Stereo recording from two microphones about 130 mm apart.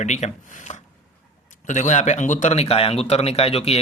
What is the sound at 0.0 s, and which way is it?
Speech, 60° left (ahead or behind).